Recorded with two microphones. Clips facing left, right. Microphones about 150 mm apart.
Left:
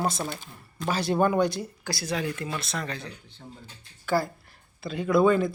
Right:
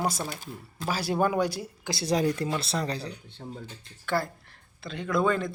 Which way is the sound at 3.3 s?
65° right (ahead or behind).